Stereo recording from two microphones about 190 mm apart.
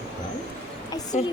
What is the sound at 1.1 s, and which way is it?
Speech, 40° left (ahead or behind).